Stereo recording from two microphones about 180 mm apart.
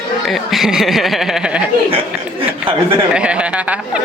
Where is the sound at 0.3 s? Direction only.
Centre (ahead or behind).